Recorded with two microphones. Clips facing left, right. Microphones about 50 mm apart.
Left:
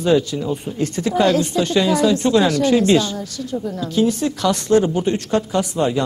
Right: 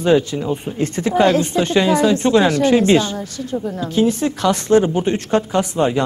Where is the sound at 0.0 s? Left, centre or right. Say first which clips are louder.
Right 2 dB; right.